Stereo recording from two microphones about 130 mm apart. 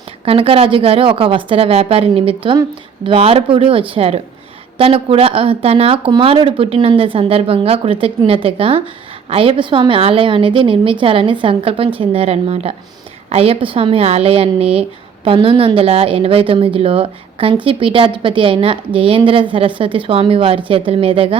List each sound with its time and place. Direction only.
0.3 s a woman's voice: 45° right (ahead or behind)